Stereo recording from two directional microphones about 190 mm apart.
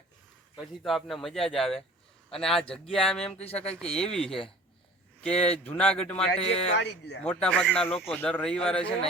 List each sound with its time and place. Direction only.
0.7 s speech: centre (ahead or behind)
3.3 s speech: 30° left (ahead or behind)
3.6 s speech: 5° left (ahead or behind)
6.4 s speech: 30° left (ahead or behind)
6.7 s speech: 65° left (ahead or behind)
7.2 s speech: 5° left (ahead or behind)